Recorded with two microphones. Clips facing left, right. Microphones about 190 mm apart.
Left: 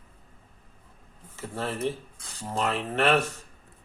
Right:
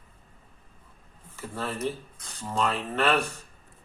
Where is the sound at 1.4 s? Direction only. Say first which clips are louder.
Left 1 dB; 25° left (ahead or behind).